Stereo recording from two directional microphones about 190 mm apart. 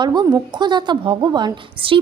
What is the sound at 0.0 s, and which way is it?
A woman's voice, 20° right (ahead or behind).